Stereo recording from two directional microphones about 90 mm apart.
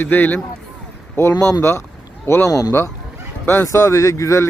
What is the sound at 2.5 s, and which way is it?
Speech, 40° left (ahead or behind).